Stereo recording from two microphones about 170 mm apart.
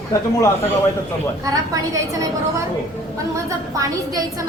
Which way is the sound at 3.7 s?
20° right (ahead or behind).